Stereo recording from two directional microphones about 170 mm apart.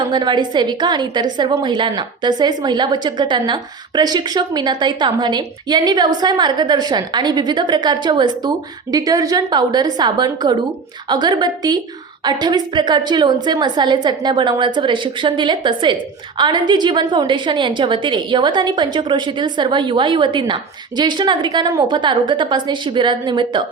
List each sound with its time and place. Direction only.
0.0 s a woman's voice: 25° right (ahead or behind)